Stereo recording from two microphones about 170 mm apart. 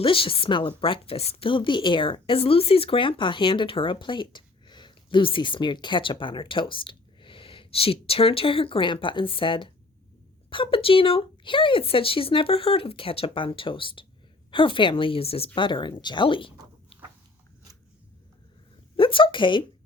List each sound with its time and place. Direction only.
0.0 s speech: 30° left (ahead or behind)
18.9 s a woman's voice: 30° left (ahead or behind)